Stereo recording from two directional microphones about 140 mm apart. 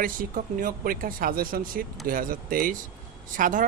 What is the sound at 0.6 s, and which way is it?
Speech, 85° right.